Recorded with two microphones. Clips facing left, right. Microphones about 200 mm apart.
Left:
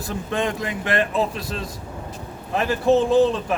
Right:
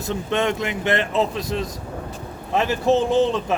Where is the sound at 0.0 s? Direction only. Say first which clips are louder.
Right 2 dB; 25° right (ahead or behind).